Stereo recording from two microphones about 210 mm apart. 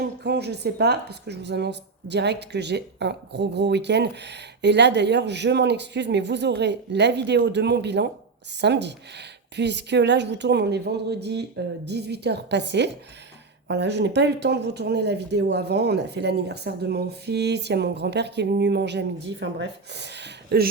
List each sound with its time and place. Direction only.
0.2 s speech: 50° right (ahead or behind)